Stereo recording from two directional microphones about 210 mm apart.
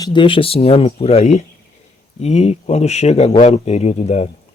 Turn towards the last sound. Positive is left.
turn(degrees=30)  # may be behind; listen again after turning